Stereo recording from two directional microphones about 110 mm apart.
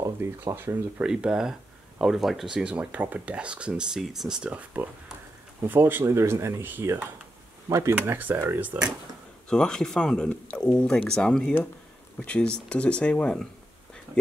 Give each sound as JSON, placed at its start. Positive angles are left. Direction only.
{"t": 0.0, "sound": "speech", "side_deg": -25}
{"t": 1.0, "sound": "speech", "side_deg": -5}
{"t": 9.5, "sound": "speech", "side_deg": 5}